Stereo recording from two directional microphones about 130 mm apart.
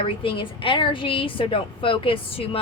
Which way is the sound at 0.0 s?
45° left (ahead or behind).